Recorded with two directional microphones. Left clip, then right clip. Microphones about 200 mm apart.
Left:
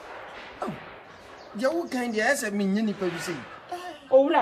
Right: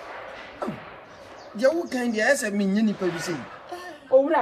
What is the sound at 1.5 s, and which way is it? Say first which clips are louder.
Speech: right 4 dB; 15° left (ahead or behind).